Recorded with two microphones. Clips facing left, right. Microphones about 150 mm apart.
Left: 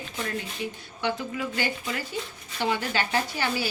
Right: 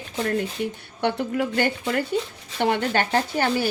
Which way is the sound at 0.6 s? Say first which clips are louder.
Right 5 dB; 55° right (ahead or behind).